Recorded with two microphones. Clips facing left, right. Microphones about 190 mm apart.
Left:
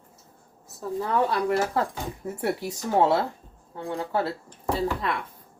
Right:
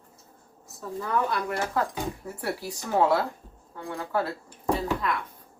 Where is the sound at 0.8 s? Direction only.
30° left (ahead or behind).